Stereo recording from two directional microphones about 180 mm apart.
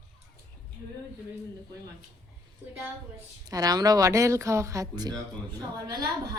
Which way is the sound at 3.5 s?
20° right (ahead or behind).